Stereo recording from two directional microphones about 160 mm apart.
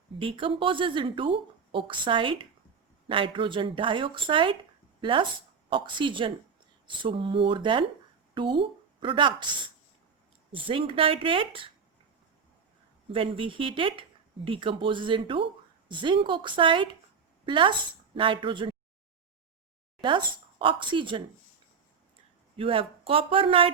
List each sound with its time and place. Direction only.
0.2 s a woman's voice: 35° right (ahead or behind)
13.1 s speech: 35° right (ahead or behind)
20.0 s speech: 30° right (ahead or behind)
22.5 s speech: 35° right (ahead or behind)